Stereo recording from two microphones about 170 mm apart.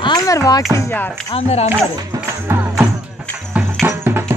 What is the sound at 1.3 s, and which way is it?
Speech, 40° left (ahead or behind).